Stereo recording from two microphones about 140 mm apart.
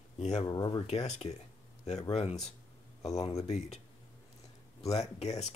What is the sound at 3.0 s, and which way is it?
Speech, 50° left (ahead or behind).